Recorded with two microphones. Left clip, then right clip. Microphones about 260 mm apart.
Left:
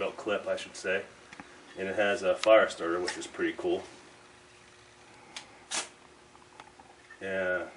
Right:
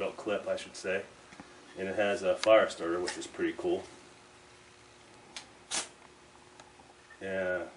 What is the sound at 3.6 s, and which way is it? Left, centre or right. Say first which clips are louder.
Speech: even; left.